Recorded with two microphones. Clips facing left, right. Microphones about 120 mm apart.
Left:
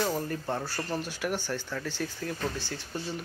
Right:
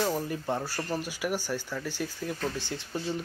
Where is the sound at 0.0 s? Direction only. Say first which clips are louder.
Right 1 dB; 10° right (ahead or behind).